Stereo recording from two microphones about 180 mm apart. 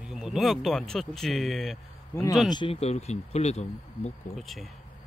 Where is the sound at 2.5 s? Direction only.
30° left (ahead or behind).